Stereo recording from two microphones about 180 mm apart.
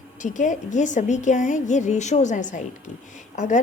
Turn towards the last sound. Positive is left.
turn(degrees=45)  # may be behind; listen again after turning